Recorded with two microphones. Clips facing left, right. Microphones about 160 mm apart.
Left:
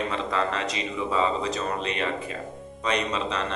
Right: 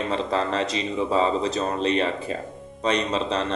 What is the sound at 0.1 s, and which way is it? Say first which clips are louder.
Speech: right 3 dB; 30° right (ahead or behind).